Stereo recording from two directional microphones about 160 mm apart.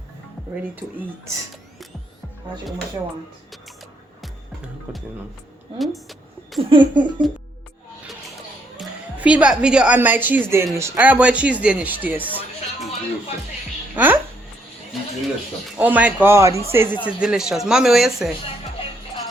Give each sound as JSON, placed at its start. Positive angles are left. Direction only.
{"t": 0.5, "sound": "speech", "side_deg": -10}
{"t": 4.9, "sound": "speech", "side_deg": -10}
{"t": 5.8, "sound": "a sound", "side_deg": 0}
{"t": 6.6, "sound": "speech", "side_deg": -30}
{"t": 8.8, "sound": "a woman's voice", "side_deg": -10}
{"t": 13.9, "sound": "speech", "side_deg": -10}
{"t": 15.8, "sound": "speech", "side_deg": -10}